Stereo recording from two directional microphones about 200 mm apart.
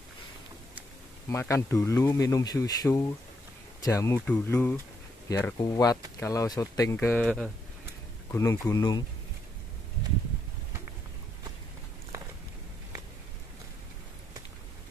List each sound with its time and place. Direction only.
1.3 s speech: 15° left (ahead or behind)
8.3 s speech: 15° left (ahead or behind)